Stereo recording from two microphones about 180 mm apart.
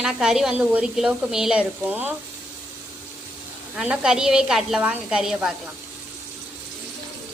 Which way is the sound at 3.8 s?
5° right (ahead or behind).